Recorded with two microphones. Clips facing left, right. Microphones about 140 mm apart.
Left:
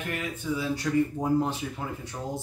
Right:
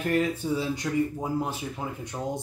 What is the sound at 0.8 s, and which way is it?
Speech, 10° right (ahead or behind).